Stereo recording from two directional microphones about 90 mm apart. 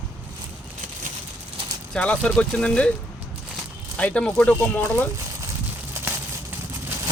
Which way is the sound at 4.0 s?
15° left (ahead or behind).